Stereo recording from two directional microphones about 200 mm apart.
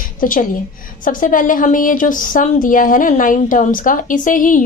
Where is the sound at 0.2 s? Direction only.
45° left (ahead or behind).